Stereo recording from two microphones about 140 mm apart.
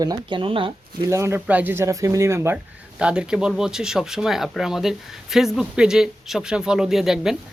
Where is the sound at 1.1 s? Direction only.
20° right (ahead or behind).